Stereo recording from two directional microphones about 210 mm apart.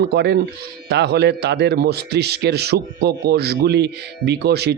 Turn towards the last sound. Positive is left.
turn(degrees=-50)  # may be behind; listen again after turning